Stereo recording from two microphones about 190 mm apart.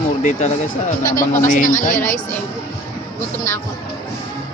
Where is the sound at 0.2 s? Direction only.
40° left (ahead or behind).